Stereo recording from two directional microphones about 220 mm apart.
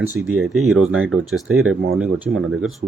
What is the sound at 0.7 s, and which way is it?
Speech, 70° right (ahead or behind).